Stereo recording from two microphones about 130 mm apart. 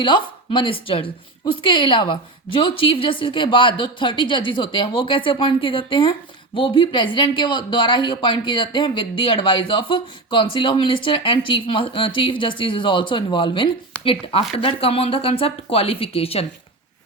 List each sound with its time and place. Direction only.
0.0 s a woman's voice: 40° left (ahead or behind)